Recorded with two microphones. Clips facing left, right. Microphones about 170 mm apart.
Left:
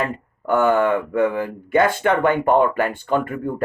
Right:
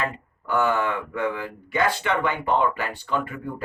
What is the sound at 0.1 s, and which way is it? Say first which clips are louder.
Speech: left 6 dB; 50° left (ahead or behind).